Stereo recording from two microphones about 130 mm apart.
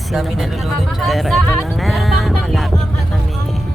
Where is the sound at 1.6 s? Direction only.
Centre (ahead or behind).